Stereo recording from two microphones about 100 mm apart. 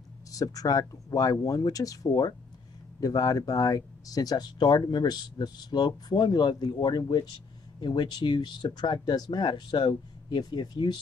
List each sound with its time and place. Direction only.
0.3 s speech: 35° left (ahead or behind)